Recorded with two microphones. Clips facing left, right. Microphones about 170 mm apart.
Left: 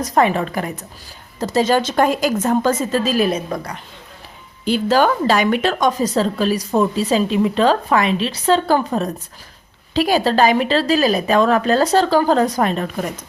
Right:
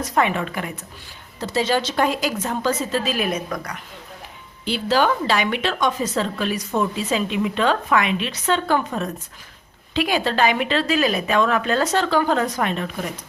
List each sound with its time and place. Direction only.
0.0 s a woman's voice: 40° left (ahead or behind)
4.6 s a woman's voice: 45° left (ahead or behind)